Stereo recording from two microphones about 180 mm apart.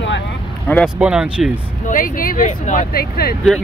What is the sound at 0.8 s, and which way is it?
Speech, 5° right (ahead or behind).